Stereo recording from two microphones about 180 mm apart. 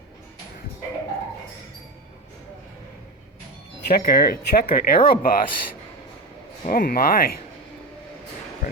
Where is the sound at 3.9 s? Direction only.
60° left (ahead or behind).